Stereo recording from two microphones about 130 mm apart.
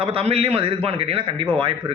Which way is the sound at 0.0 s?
50° right (ahead or behind).